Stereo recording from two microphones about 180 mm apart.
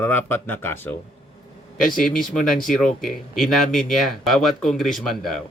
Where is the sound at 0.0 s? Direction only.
10° left (ahead or behind).